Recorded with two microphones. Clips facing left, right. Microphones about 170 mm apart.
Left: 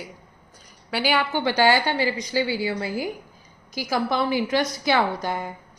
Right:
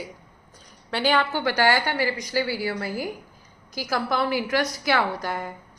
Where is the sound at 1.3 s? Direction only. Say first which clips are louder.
Left 2 dB; 20° left (ahead or behind).